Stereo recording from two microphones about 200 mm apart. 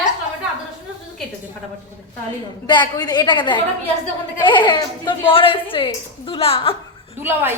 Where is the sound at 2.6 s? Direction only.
20° left (ahead or behind).